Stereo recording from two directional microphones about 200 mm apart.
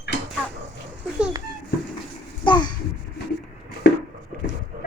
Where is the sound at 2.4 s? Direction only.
20° left (ahead or behind).